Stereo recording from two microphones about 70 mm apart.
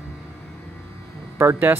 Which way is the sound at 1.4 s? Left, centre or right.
Right.